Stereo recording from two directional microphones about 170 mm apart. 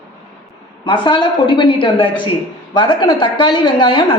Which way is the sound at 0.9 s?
30° left (ahead or behind).